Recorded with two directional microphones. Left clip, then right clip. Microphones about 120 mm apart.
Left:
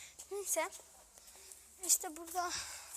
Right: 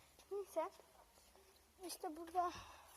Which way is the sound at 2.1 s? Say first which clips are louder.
Left 2 dB; 10° right (ahead or behind).